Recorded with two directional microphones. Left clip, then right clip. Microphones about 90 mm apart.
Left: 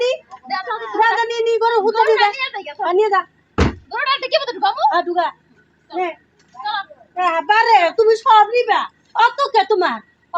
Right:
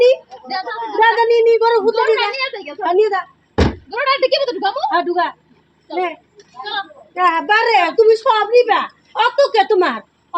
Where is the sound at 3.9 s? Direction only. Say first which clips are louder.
Right 3 dB; 20° left (ahead or behind).